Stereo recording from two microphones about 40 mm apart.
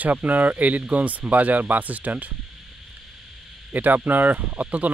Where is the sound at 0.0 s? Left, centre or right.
Right.